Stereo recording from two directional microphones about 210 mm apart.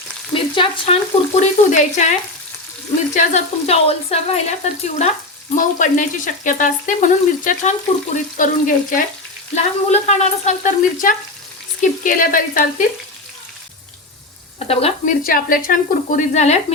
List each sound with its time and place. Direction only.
0.3 s stir: 25° left (ahead or behind)
1.4 s speech: 35° left (ahead or behind)
3.2 s speech: 30° left (ahead or behind)
14.7 s speech: 30° left (ahead or behind)
15.2 s speech: 45° left (ahead or behind)